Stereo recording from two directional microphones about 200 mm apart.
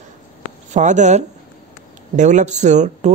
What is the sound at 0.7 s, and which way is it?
Speech, 35° right (ahead or behind).